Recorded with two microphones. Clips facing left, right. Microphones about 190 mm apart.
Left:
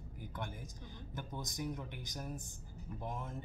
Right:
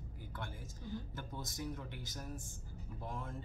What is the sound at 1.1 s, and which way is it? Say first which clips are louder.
Speech: left 2 dB; 15° left (ahead or behind).